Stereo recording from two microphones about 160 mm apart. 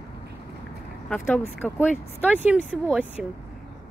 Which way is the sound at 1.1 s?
5° left (ahead or behind).